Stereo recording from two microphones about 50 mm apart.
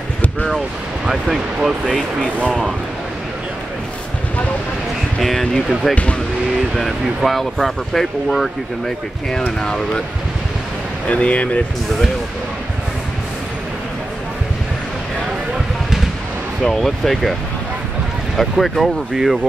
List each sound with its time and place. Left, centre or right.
1.0 s speech: centre
2.4 s speech: centre
5.2 s speech: centre
7.2 s speech: centre
11.1 s speech: left
16.6 s speech: centre